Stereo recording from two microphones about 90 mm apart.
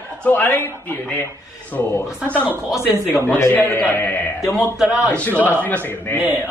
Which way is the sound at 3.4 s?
25° left (ahead or behind).